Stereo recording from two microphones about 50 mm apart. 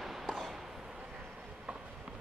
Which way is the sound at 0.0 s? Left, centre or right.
Centre.